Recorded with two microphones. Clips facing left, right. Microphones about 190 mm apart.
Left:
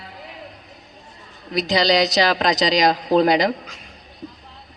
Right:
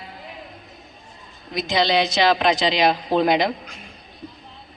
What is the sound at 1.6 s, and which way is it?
A woman's voice, 40° left (ahead or behind).